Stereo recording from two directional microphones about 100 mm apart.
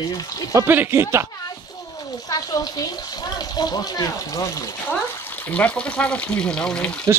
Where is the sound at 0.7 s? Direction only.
20° right (ahead or behind).